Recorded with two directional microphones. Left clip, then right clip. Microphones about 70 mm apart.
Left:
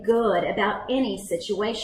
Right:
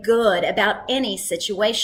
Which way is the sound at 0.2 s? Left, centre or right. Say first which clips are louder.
Right 4 dB; right.